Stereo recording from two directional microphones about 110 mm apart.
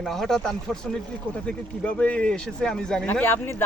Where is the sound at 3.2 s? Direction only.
20° left (ahead or behind).